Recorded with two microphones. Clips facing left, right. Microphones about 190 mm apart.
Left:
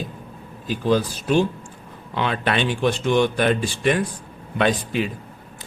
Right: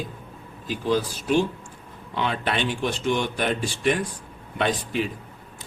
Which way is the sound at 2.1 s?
85° left.